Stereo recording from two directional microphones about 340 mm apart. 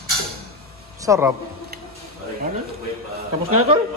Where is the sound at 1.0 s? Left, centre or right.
Centre.